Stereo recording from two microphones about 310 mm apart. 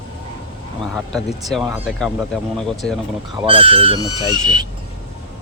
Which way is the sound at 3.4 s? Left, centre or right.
Centre.